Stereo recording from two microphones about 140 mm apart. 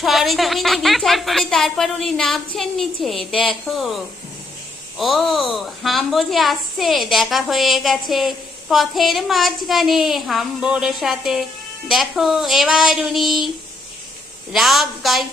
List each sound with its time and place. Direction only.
0.0 s a woman's voice: centre (ahead or behind)
14.5 s a woman's voice: centre (ahead or behind)